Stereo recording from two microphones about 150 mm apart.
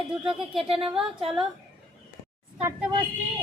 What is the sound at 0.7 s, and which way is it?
Speech, 40° right (ahead or behind).